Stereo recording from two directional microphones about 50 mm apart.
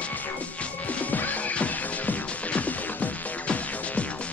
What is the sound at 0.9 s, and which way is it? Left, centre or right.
Music, left.